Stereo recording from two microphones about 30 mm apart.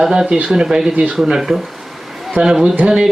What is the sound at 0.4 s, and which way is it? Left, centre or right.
Speech, right.